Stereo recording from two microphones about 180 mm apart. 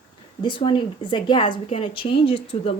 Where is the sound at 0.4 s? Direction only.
30° left (ahead or behind).